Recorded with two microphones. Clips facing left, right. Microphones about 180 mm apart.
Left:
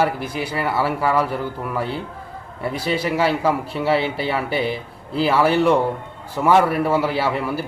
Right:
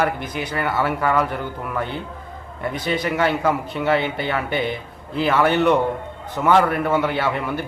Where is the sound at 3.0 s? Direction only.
5° left (ahead or behind).